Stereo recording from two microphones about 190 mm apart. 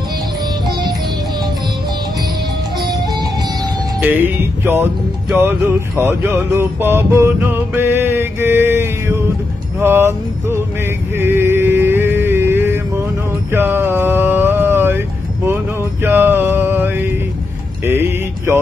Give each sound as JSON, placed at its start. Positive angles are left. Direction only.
{"t": 2.9, "sound": "music", "side_deg": -20}
{"t": 4.0, "sound": "music", "side_deg": -10}
{"t": 13.5, "sound": "a sound", "side_deg": -10}
{"t": 17.8, "sound": "music", "side_deg": -10}